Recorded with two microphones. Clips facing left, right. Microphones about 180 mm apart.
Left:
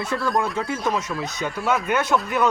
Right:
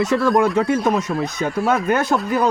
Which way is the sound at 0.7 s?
60° right (ahead or behind).